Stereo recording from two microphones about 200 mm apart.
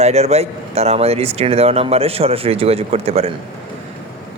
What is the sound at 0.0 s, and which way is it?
Speech, 30° right (ahead or behind).